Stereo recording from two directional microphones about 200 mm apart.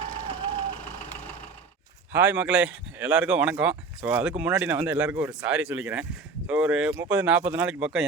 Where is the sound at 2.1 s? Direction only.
10° right (ahead or behind).